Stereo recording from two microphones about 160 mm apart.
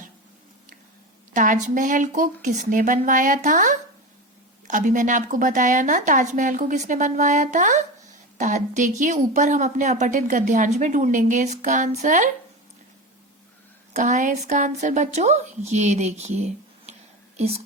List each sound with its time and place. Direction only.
1.3 s speech: 50° right (ahead or behind)
13.9 s speech: 50° right (ahead or behind)